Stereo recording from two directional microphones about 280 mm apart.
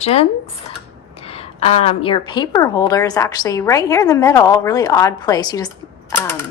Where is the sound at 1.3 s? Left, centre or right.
Left.